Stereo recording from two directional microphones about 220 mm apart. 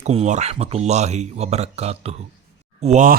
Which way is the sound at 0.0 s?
30° right (ahead or behind).